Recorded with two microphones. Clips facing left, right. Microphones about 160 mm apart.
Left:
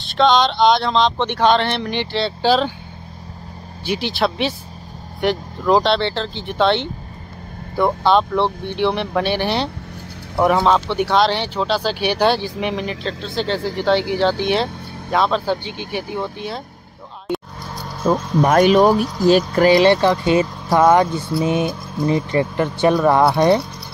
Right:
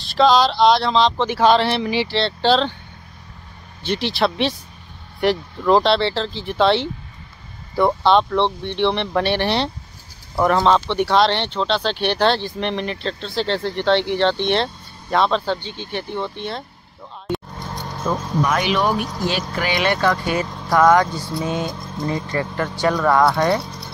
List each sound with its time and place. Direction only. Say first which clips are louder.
0.0 s speech: even; centre (ahead or behind)
3.8 s speech: even; 5° left (ahead or behind)
17.3 s vehicle: left 1 dB; 5° left (ahead or behind)
18.4 s speech: left 8 dB; 50° left (ahead or behind); by 23.6 s 20° left (ahead or behind)